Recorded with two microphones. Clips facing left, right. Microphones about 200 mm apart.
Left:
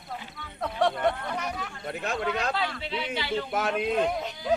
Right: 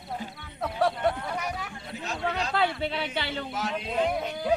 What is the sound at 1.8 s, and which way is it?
Speech, 55° left (ahead or behind).